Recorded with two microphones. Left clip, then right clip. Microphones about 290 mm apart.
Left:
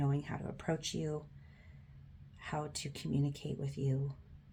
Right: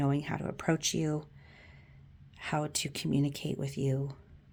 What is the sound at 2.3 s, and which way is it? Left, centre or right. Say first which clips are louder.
Speech: right 7 dB; right.